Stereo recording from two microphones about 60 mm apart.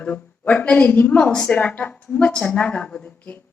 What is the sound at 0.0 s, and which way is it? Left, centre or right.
A woman's voice, left.